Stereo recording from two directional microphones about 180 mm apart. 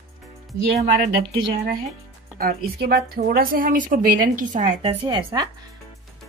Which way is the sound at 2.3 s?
55° right (ahead or behind).